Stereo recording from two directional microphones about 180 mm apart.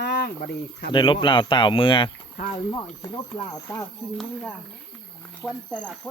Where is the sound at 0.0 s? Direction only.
65° left (ahead or behind).